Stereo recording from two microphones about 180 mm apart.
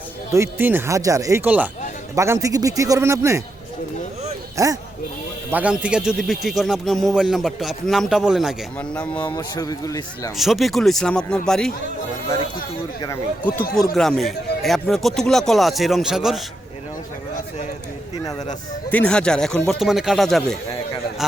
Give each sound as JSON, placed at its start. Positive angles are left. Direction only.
{"t": 0.3, "sound": "speech", "side_deg": -15}
{"t": 4.5, "sound": "speech", "side_deg": -20}
{"t": 5.5, "sound": "a man's voice", "side_deg": -10}
{"t": 9.2, "sound": "speech", "side_deg": 20}
{"t": 10.3, "sound": "a man's voice", "side_deg": 0}
{"t": 13.9, "sound": "a man's voice", "side_deg": 0}
{"t": 18.9, "sound": "a man's voice", "side_deg": 5}